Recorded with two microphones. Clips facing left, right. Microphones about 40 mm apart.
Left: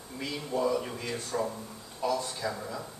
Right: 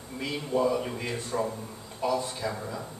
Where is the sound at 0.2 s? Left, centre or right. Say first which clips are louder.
Right 3 dB; centre.